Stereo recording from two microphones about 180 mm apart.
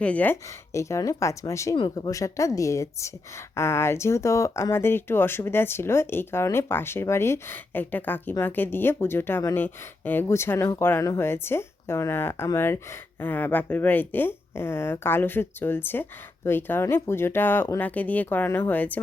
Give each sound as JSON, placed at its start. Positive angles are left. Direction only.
{"t": 0.0, "sound": "speech", "side_deg": 10}